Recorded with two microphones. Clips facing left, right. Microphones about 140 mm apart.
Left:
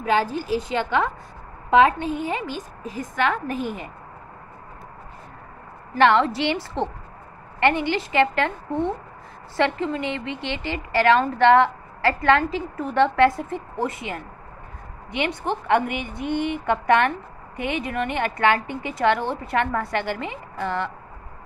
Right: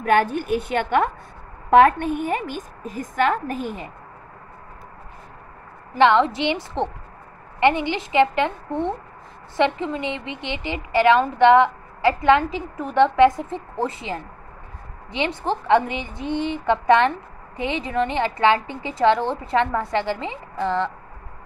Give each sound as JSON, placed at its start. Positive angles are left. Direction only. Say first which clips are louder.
{"t": 0.0, "sound": "a woman's voice", "louder": "right 3 dB", "side_deg": -60}
{"t": 5.9, "sound": "a woman's voice", "louder": "right 1 dB", "side_deg": -20}
{"t": 13.7, "sound": "a woman's voice", "louder": "right 2 dB", "side_deg": -30}